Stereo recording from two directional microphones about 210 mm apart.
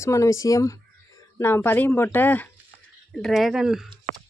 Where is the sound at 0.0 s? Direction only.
15° left (ahead or behind).